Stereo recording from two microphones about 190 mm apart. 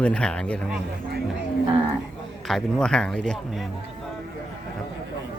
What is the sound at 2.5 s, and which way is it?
Speech, 5° left (ahead or behind).